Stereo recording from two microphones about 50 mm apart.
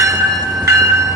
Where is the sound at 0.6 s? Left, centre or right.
Right.